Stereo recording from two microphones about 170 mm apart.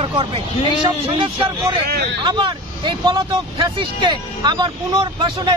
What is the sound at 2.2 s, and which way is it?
Speech, 30° right (ahead or behind).